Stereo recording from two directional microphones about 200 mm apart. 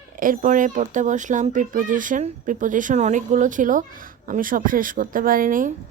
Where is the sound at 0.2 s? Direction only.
40° right (ahead or behind).